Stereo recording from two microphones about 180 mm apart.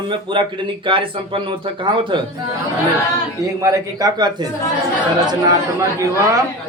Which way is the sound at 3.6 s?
20° right (ahead or behind).